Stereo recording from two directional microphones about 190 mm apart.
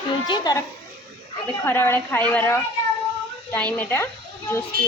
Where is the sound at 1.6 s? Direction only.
10° left (ahead or behind).